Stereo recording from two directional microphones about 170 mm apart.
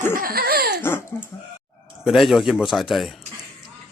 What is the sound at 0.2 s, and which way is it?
Laughter, 60° right (ahead or behind).